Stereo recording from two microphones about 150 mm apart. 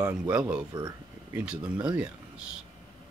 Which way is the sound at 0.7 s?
30° right (ahead or behind).